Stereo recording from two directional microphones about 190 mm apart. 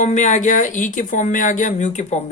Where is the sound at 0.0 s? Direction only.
40° left (ahead or behind).